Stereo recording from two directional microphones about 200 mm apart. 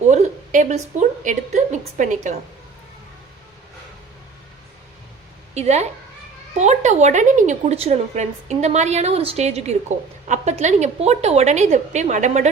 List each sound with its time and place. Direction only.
0.1 s a woman's voice: 35° right (ahead or behind)
5.5 s a woman's voice: 35° right (ahead or behind)